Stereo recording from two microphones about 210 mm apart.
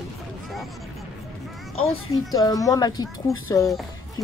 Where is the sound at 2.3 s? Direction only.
15° left (ahead or behind).